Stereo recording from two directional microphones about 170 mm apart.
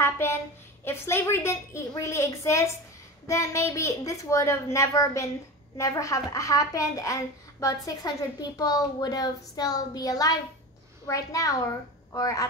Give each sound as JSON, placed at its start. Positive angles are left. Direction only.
{"t": 0.0, "sound": "a woman's voice", "side_deg": 15}